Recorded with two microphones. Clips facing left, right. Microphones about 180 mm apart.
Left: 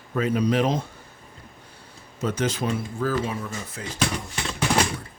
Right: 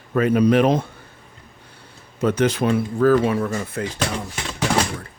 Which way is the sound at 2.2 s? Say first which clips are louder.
Right 7 dB; 60° right (ahead or behind).